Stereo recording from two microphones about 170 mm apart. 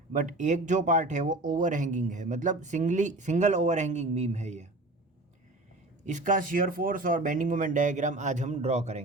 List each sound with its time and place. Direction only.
0.1 s speech: 50° right (ahead or behind)
6.1 s speech: 45° right (ahead or behind)